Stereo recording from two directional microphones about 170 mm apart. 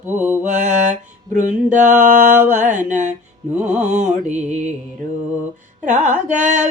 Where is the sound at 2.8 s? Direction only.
45° right (ahead or behind).